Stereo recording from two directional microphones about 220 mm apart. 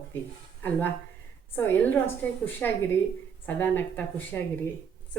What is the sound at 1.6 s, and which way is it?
Speech, 10° left (ahead or behind).